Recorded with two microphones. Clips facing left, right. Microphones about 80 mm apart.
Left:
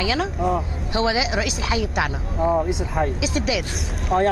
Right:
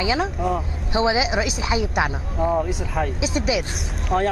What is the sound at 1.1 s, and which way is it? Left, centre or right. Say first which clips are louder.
Speech: right 1 dB; right.